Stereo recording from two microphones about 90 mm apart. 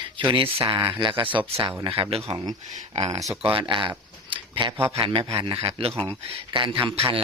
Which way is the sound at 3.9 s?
60° right (ahead or behind).